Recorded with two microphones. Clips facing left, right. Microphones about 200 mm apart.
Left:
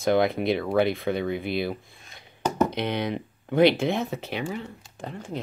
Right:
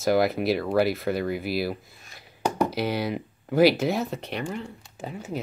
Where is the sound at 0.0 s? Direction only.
5° right (ahead or behind).